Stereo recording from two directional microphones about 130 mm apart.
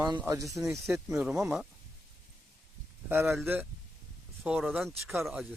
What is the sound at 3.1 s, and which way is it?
A man's voice, 15° right (ahead or behind).